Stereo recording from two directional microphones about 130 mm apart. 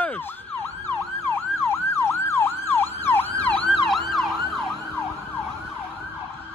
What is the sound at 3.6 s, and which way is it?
Emergency vehicle, centre (ahead or behind).